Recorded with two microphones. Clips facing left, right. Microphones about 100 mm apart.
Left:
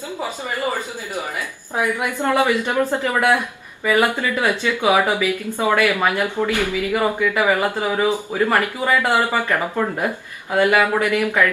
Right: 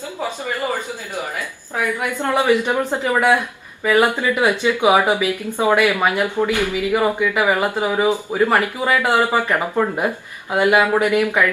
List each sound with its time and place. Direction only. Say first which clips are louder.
1.7 s a woman's voice: left 1 dB; 20° left (ahead or behind)
2.1 s speech: right 2 dB; 15° right (ahead or behind)